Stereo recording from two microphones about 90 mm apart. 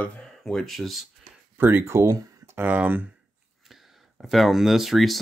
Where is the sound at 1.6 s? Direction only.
25° right (ahead or behind).